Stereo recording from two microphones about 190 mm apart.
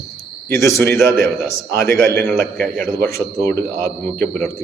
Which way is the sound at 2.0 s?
55° right (ahead or behind).